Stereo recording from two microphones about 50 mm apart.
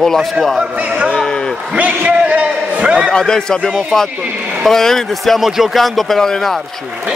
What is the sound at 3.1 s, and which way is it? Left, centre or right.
Speech, centre.